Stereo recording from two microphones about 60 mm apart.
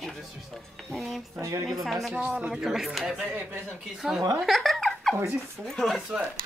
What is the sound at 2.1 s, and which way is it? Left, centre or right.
Speech, centre.